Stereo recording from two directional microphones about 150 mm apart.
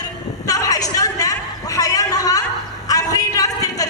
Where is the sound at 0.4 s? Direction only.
25° left (ahead or behind).